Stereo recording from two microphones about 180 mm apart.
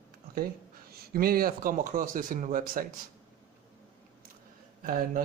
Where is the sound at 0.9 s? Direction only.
55° right (ahead or behind).